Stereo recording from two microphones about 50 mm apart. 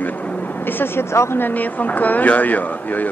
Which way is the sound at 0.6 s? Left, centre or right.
Left.